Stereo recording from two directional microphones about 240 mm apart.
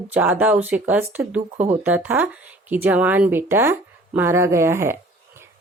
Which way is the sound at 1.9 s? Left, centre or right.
Centre.